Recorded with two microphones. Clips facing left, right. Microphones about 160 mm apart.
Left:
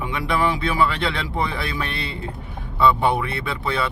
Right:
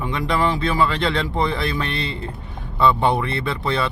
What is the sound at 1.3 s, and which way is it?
Music, 10° left (ahead or behind).